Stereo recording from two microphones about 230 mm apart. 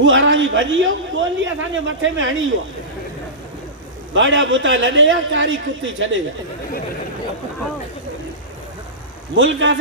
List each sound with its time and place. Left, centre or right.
0.0 s a man's voice: right
4.1 s a man's voice: right
9.3 s a man's voice: right